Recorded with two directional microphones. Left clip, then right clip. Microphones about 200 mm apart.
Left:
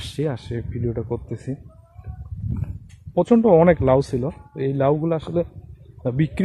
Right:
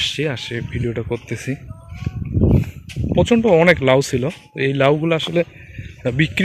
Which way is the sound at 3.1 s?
10° left (ahead or behind).